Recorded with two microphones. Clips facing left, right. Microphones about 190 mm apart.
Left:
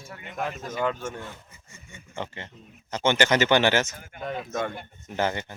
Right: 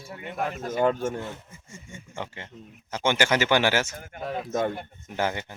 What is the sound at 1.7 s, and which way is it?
Speech, 45° right (ahead or behind).